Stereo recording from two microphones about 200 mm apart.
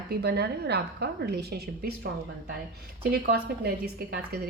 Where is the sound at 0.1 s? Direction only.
55° right (ahead or behind).